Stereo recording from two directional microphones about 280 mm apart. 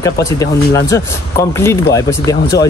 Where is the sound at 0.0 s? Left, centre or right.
Centre.